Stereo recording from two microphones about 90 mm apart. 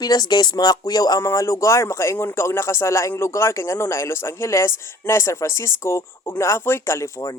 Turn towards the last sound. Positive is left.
turn(degrees=35)  # may be behind; listen again after turning